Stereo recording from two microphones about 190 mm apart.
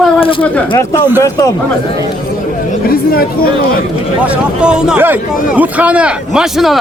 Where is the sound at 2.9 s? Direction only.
50° left (ahead or behind).